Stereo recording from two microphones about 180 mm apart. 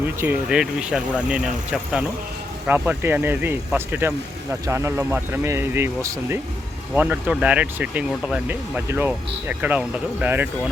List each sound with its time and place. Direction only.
0.0 s speech: 10° right (ahead or behind)